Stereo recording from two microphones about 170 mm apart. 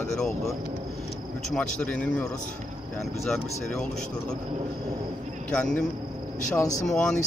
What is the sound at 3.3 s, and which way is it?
Speech, 5° left (ahead or behind).